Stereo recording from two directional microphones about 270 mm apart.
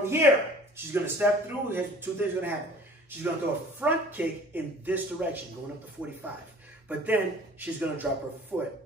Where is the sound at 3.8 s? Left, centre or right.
Centre.